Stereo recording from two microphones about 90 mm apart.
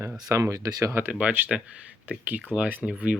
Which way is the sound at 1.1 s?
15° right (ahead or behind).